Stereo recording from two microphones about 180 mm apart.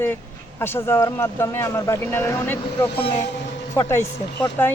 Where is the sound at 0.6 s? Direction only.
15° left (ahead or behind).